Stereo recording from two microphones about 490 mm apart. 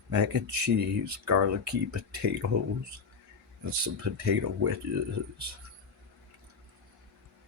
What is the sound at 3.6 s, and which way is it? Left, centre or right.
Speech, right.